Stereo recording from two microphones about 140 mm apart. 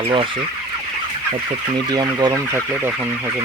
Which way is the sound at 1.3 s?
30° right (ahead or behind).